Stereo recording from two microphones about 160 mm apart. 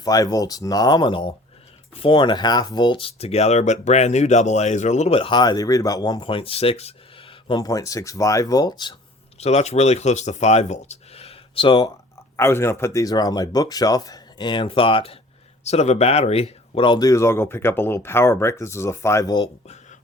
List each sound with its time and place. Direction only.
0.0 s speech: 20° left (ahead or behind)
9.4 s speech: 45° left (ahead or behind)
12.4 s speech: 15° left (ahead or behind)
19.6 s a sound: 45° left (ahead or behind)